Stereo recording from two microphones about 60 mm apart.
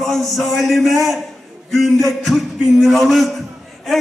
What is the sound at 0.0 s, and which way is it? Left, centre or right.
A man's voice, centre.